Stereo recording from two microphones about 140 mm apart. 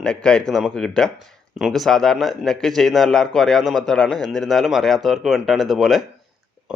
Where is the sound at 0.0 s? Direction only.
5° left (ahead or behind).